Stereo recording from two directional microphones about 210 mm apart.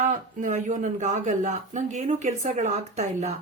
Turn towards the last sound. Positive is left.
turn(degrees=-35)  # may be behind; listen again after turning